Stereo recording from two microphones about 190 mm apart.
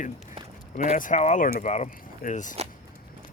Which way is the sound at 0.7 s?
40° left (ahead or behind).